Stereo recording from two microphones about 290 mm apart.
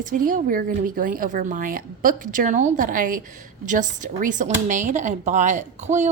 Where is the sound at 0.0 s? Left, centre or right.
Right.